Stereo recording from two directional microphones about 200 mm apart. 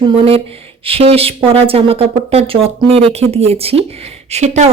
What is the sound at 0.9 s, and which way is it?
Speech, 30° right (ahead or behind).